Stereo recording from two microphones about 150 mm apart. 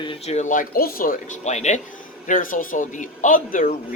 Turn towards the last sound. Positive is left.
turn(degrees=65)  # may be behind; listen again after turning